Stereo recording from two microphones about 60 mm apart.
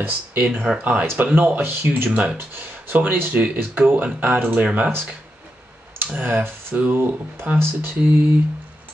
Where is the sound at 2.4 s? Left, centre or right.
Right.